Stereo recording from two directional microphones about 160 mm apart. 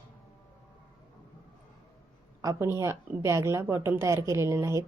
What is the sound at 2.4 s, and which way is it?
A woman's voice, 15° right (ahead or behind).